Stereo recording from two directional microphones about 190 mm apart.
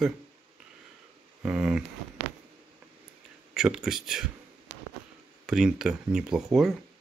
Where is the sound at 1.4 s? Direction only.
5° right (ahead or behind).